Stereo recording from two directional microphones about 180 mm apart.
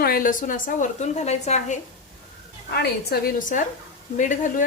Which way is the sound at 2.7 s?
60° left (ahead or behind).